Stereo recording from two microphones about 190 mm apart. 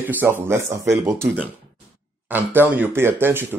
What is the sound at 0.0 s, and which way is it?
Speech, 10° right (ahead or behind).